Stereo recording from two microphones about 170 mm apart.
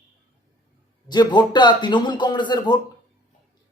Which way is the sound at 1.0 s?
25° left (ahead or behind).